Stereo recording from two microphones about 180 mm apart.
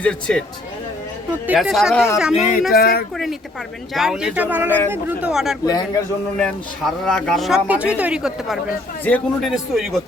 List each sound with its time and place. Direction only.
0.0 s a man's voice: 5° left (ahead or behind)
1.5 s a man's voice: centre (ahead or behind)
2.3 s speech: 45° left (ahead or behind)
2.7 s speech: 60° left (ahead or behind)
3.9 s a man's voice: centre (ahead or behind)
5.6 s a man's voice: 20° left (ahead or behind)
6.3 s a man's voice: 5° left (ahead or behind)
9.0 s a man's voice: 10° left (ahead or behind)